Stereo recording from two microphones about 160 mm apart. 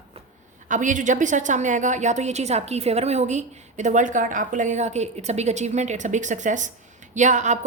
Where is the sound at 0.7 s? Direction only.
50° right (ahead or behind).